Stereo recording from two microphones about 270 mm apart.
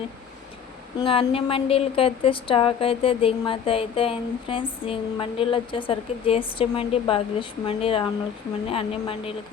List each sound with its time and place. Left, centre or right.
0.9 s a woman's voice: centre